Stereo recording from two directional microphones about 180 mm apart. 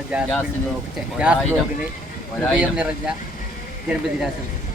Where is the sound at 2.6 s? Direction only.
5° right (ahead or behind).